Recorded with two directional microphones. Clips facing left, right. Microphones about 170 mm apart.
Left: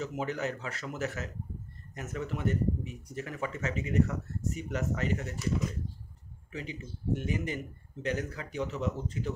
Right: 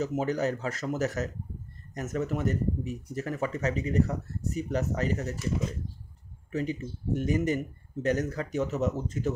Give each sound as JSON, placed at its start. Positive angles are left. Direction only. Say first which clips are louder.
{"t": 0.0, "sound": "speech", "louder": "right 6 dB", "side_deg": -40}
{"t": 6.5, "sound": "speech", "louder": "right 9 dB", "side_deg": -45}